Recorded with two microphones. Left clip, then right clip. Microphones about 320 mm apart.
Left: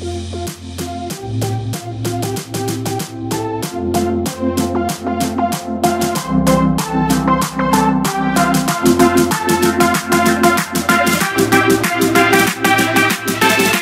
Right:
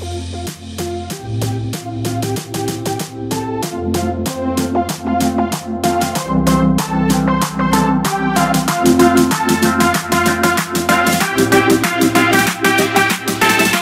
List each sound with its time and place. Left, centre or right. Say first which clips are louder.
2.0 s music: left 1 dB; centre